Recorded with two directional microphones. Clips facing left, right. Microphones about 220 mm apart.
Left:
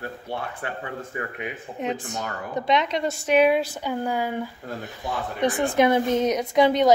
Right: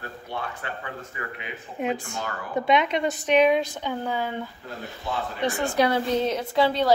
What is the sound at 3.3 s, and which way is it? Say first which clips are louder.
Speech: left 1 dB; 5° left (ahead or behind).